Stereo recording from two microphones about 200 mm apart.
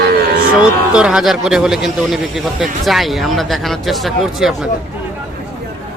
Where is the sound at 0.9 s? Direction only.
5° right (ahead or behind).